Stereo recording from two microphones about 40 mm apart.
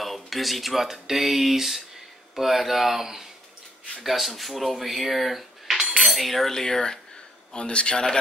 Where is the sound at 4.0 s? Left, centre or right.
Centre.